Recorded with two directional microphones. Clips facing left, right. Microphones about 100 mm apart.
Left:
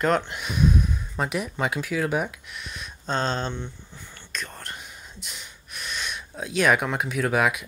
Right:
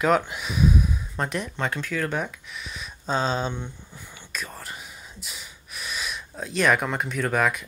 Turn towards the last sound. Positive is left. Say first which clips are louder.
# left 1 dB
turn(degrees=5)  # may be behind; listen again after turning